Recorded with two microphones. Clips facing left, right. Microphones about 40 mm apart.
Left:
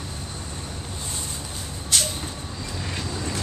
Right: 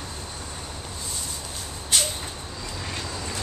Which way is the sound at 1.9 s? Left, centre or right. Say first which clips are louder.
Even; centre.